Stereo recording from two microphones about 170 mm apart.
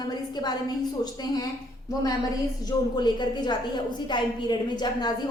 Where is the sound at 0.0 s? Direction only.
25° left (ahead or behind).